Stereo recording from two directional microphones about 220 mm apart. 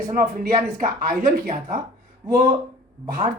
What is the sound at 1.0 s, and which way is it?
Speech, 40° right (ahead or behind).